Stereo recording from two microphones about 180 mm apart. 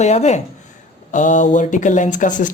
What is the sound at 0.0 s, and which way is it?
Speech, 40° left (ahead or behind).